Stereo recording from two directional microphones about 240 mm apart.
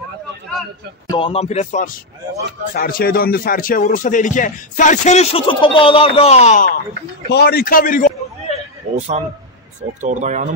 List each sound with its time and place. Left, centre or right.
1.1 s speech: left
8.9 s speech: right